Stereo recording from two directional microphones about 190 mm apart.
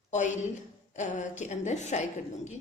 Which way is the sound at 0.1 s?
40° left (ahead or behind).